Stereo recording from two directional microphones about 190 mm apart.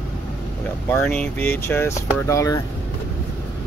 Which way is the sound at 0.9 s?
5° left (ahead or behind).